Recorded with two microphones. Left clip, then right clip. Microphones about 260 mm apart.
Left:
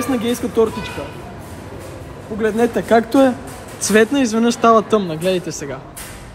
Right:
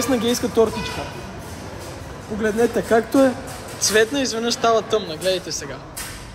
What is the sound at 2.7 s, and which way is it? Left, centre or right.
Speech, left.